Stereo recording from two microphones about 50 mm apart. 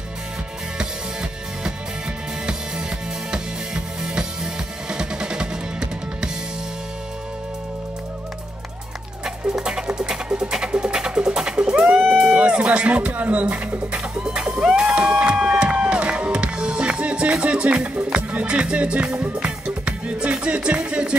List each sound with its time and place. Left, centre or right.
3.3 s music: centre
9.2 s music: centre; by 14.0 s right
14.2 s music: centre